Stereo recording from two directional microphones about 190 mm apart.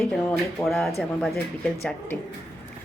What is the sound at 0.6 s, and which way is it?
Speech, centre (ahead or behind).